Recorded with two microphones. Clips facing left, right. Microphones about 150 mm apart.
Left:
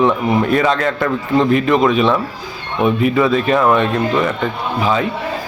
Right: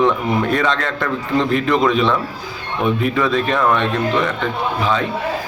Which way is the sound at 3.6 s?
15° left (ahead or behind).